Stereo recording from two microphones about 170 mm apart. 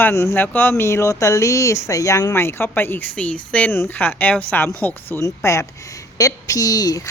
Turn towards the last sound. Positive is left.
turn(degrees=20)  # may be behind; listen again after turning